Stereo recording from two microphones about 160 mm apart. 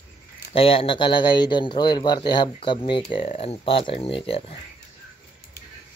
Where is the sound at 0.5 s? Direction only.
35° left (ahead or behind).